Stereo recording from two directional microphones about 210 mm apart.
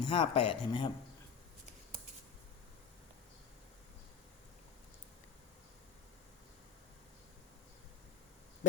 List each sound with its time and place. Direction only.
0.0 s speech: 25° left (ahead or behind)